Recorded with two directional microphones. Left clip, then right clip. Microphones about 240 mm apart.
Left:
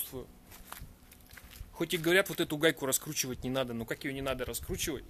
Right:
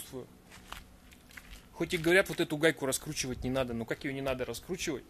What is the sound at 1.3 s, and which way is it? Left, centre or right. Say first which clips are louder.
Speech: even; centre.